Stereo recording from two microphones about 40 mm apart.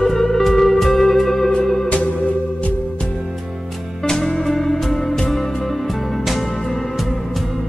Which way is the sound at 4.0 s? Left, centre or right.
Centre.